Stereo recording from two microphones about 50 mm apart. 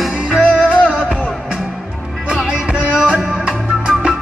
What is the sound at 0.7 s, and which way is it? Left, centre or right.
Music, centre.